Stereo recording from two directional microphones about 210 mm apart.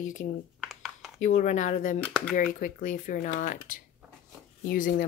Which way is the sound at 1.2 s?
35° left (ahead or behind).